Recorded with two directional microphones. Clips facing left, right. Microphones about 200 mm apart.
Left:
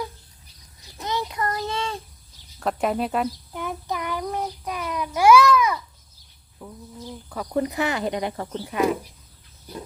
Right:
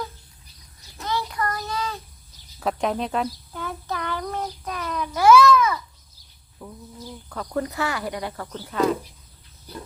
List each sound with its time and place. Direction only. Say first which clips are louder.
0.9 s child singing: even; 20° left (ahead or behind)
2.6 s speech: left 1 dB; centre (ahead or behind)
3.5 s child singing: left 2 dB; 15° left (ahead or behind)
6.6 s bird: even; 15° left (ahead or behind)
7.3 s speech: left 2 dB; 15° left (ahead or behind)